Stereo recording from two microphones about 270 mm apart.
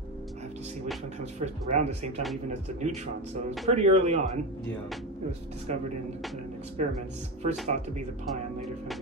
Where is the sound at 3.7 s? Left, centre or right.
Right.